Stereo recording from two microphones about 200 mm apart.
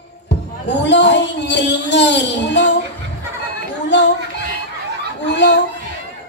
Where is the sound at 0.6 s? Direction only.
60° left (ahead or behind).